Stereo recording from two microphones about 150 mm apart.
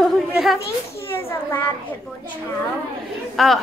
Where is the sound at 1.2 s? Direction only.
15° left (ahead or behind).